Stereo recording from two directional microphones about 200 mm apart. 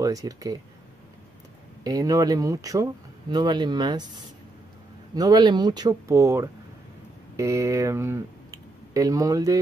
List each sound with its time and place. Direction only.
0.0 s speech: 15° right (ahead or behind)
1.9 s speech: 20° right (ahead or behind)
5.1 s speech: 20° right (ahead or behind)